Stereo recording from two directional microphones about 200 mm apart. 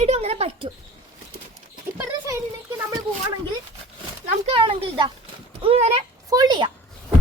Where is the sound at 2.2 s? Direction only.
15° right (ahead or behind).